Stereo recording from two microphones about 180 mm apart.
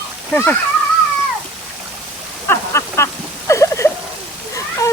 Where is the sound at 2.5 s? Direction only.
15° left (ahead or behind).